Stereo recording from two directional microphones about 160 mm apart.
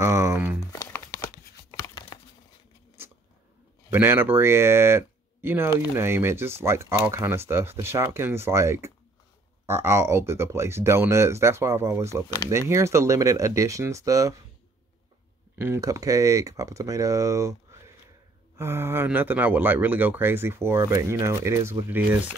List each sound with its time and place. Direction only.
0.0 s a sound: 20° right (ahead or behind)
0.7 s crumpling: 15° left (ahead or behind)
1.8 s a sound: 25° left (ahead or behind)
3.9 s speech: 15° right (ahead or behind)
15.5 s speech: 15° right (ahead or behind)
18.6 s speech: 15° right (ahead or behind)